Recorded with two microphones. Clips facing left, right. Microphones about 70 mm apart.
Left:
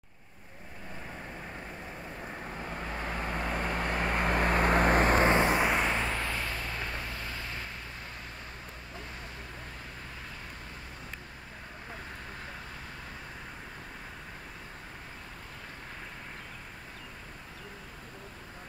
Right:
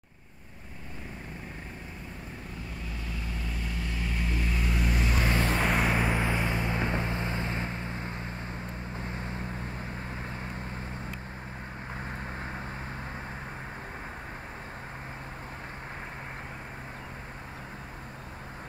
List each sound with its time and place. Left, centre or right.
2.5 s vehicle: left
5.3 s vehicle: left
5.6 s vehicle: centre
5.9 s vehicle: centre; by 9.5 s right